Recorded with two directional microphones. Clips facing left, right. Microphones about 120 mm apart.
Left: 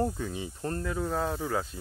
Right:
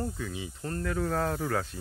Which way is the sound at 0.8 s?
15° left (ahead or behind).